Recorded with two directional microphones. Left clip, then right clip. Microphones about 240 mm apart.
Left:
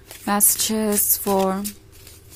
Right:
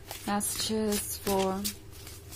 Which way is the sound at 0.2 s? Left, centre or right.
Left.